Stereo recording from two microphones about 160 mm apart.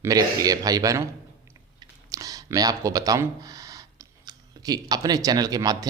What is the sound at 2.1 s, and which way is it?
A man's voice, 20° right (ahead or behind).